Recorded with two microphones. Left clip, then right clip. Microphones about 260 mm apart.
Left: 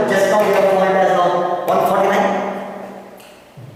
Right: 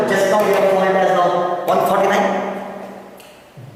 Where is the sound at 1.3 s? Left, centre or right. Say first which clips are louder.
Even; centre.